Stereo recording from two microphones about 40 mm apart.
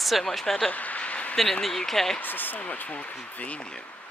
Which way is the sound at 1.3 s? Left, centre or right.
Centre.